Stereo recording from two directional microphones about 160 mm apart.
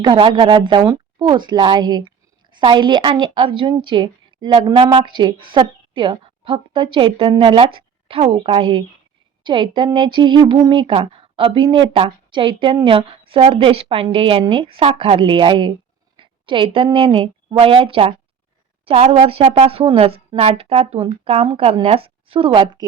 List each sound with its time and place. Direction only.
0.0 s a woman's voice: 30° right (ahead or behind)